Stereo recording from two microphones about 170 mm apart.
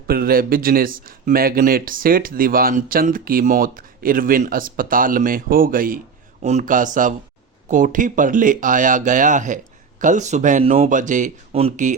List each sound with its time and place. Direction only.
0.1 s a man's voice: 60° right (ahead or behind)
6.4 s speech: 40° right (ahead or behind)